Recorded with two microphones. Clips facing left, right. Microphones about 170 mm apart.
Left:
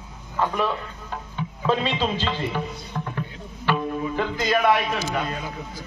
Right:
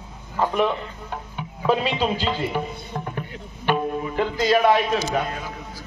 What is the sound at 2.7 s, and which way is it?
Music, 20° right (ahead or behind).